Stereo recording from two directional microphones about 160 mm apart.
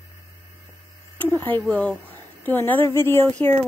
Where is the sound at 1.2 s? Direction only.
10° left (ahead or behind).